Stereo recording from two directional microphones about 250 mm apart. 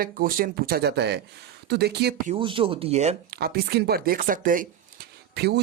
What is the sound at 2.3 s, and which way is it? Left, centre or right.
Speech, right.